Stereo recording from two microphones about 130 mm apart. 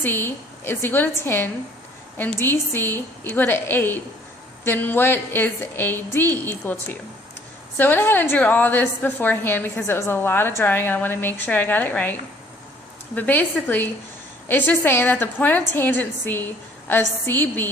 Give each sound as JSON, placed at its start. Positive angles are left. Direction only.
{"t": 0.0, "sound": "a woman's voice", "side_deg": 15}
{"t": 13.1, "sound": "a woman's voice", "side_deg": 15}